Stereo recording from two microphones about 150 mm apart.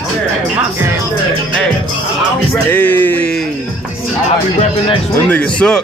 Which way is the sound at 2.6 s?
10° left (ahead or behind).